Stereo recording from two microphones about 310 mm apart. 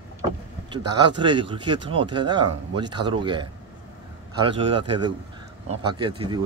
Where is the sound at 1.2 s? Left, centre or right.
Centre.